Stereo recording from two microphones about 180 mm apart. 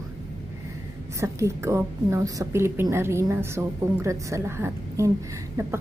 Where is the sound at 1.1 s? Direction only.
15° right (ahead or behind).